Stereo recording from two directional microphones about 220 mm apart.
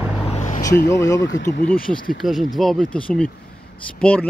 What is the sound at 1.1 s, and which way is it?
Speech, 55° left (ahead or behind).